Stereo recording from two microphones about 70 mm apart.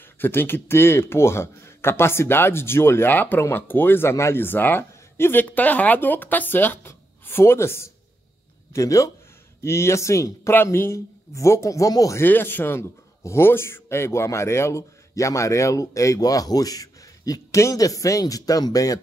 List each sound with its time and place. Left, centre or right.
0.2 s speech: left
8.7 s speech: left
10.5 s speech: left
12.2 s speech: left